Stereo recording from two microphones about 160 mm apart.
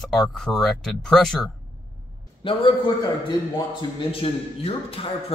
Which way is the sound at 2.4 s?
35° left (ahead or behind).